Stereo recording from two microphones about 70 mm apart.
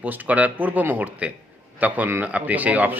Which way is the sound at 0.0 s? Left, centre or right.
Right.